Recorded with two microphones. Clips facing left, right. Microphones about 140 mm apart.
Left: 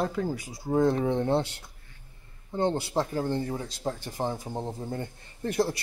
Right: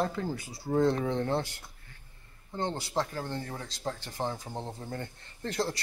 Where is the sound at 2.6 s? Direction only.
15° left (ahead or behind).